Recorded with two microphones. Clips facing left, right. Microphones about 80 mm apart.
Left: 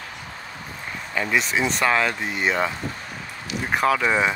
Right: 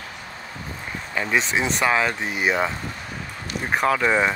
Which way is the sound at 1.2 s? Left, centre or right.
Centre.